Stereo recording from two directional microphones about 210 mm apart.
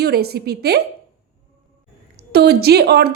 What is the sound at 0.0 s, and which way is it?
Speech, 50° right (ahead or behind).